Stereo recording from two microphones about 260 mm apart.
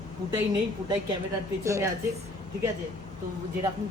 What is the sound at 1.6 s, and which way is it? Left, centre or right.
Speech, centre.